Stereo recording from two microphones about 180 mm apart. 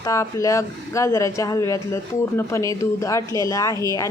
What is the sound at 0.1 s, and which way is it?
A woman's voice, 15° left (ahead or behind).